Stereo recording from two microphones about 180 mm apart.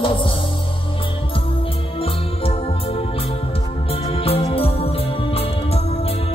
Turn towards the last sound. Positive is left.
turn(degrees=35)  # may be behind; listen again after turning